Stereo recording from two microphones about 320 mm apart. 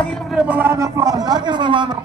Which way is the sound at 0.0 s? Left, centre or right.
Centre.